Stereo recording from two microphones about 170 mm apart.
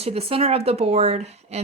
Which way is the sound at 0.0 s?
35° right (ahead or behind).